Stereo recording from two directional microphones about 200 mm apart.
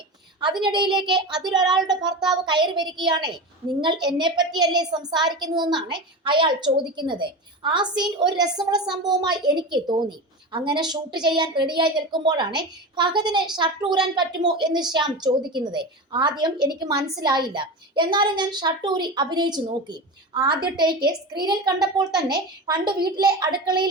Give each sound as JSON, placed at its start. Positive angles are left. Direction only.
{"t": 0.3, "sound": "a woman's voice", "side_deg": -25}